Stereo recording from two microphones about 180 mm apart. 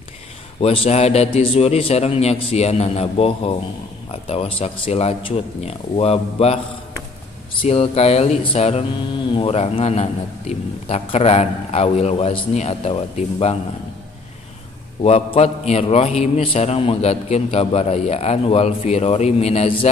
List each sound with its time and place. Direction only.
0.6 s a man's voice: 35° left (ahead or behind)
7.6 s a man's voice: 35° left (ahead or behind)
15.0 s a man's voice: 35° left (ahead or behind)